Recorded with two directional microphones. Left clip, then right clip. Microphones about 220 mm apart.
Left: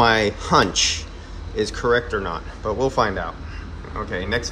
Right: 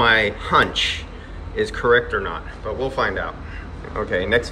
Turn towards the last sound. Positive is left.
turn(degrees=15)  # may be behind; listen again after turning